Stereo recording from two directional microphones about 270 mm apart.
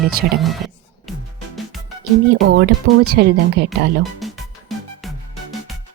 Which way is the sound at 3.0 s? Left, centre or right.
Right.